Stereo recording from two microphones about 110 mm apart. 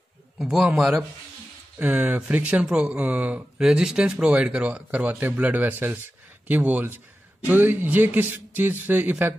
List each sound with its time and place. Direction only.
0.4 s a man's voice: 5° right (ahead or behind)
1.8 s speech: 15° right (ahead or behind)